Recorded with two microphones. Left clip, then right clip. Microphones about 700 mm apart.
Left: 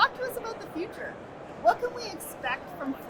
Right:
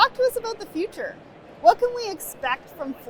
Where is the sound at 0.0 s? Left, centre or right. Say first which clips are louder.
Right 7 dB; right.